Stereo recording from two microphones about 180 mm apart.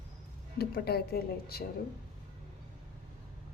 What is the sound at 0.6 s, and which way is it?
Speech, 60° left (ahead or behind).